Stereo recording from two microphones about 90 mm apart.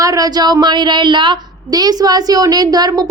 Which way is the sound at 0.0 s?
40° right (ahead or behind).